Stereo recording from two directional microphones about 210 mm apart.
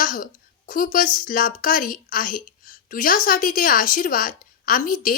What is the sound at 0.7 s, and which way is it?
A woman's voice, 40° left (ahead or behind).